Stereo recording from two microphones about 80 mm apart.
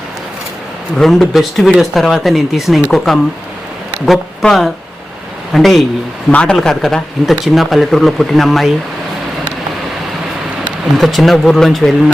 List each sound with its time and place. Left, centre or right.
0.9 s speech: centre
6.3 s speech: centre
10.9 s speech: centre